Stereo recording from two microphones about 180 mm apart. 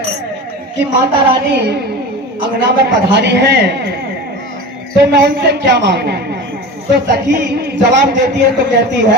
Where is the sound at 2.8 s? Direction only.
70° right (ahead or behind).